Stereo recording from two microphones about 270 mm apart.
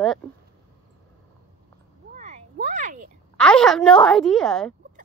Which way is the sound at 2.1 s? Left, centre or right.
Right.